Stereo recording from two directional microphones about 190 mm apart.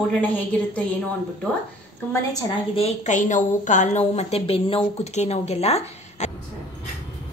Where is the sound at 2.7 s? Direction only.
35° left (ahead or behind).